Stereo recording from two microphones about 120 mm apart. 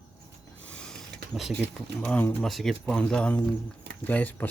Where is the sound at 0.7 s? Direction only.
5° left (ahead or behind).